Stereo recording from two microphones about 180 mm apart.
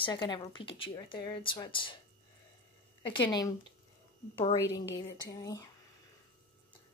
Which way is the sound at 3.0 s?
25° left (ahead or behind).